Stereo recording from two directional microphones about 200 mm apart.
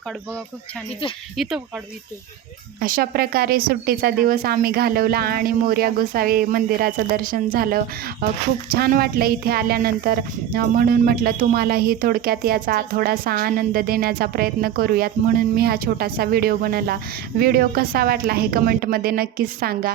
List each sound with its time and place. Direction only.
1.4 s speech: 5° right (ahead or behind)
2.8 s speech: 45° right (ahead or behind)